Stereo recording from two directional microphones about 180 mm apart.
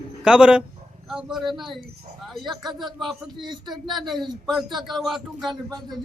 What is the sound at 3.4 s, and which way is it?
Speech, 25° right (ahead or behind).